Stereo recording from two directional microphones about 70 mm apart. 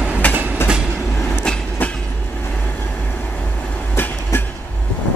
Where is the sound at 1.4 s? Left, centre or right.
Centre.